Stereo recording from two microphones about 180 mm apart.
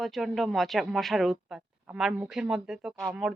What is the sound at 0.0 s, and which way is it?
A woman's voice, centre (ahead or behind).